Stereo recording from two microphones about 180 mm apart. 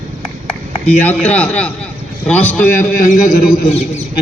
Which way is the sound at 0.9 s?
10° left (ahead or behind).